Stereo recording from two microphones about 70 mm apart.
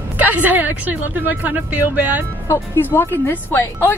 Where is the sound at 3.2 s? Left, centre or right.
Left.